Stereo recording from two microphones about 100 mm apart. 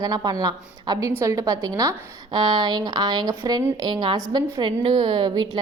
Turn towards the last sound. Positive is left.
turn(degrees=-45)  # may be behind; listen again after turning